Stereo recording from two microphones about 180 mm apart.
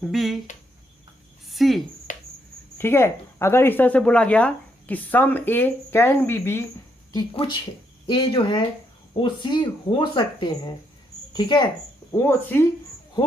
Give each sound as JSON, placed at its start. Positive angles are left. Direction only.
{"t": 0.0, "sound": "speech", "side_deg": 0}
{"t": 1.5, "sound": "a sound", "side_deg": 0}
{"t": 2.1, "sound": "cricket", "side_deg": 45}
{"t": 2.7, "sound": "speech", "side_deg": 15}
{"t": 8.0, "sound": "speech", "side_deg": 25}
{"t": 12.1, "sound": "speech", "side_deg": 15}